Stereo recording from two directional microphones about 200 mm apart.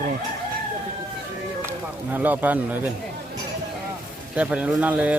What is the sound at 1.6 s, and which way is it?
Speech, 10° right (ahead or behind).